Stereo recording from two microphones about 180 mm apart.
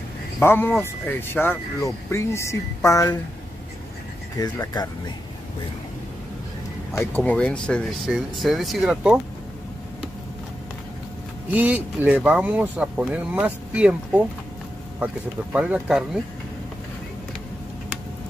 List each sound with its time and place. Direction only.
0.4 s speech: 10° left (ahead or behind)
4.4 s speech: 20° left (ahead or behind)
6.9 s speech: 15° left (ahead or behind); by 9.2 s 5° right (ahead or behind)
11.5 s speech: 10° right (ahead or behind)
15.5 s speech: 5° right (ahead or behind)